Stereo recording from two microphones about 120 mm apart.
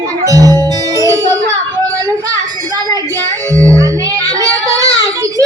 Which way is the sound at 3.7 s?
25° right (ahead or behind).